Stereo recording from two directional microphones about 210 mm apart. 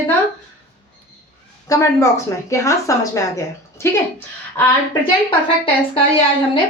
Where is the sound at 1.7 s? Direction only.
15° left (ahead or behind).